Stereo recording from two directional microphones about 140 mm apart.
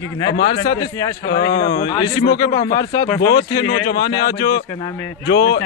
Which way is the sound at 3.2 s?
30° left (ahead or behind).